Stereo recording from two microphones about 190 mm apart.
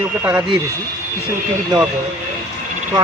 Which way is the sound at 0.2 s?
10° right (ahead or behind).